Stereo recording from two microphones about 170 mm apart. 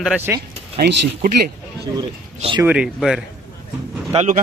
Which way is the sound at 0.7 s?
60° right (ahead or behind).